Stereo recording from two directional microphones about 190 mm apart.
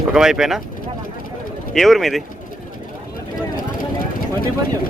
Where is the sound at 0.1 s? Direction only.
5° right (ahead or behind).